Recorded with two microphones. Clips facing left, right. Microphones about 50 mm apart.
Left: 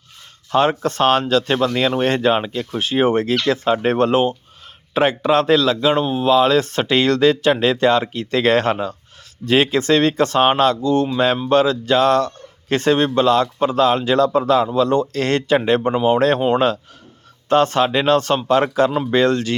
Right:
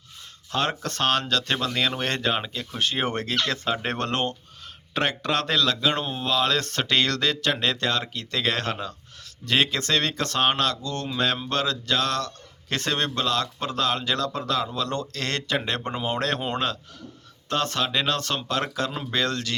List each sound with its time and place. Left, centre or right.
0.5 s speech: left